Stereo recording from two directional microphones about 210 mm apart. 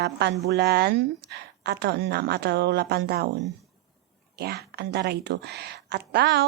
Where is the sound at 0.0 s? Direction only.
50° right (ahead or behind).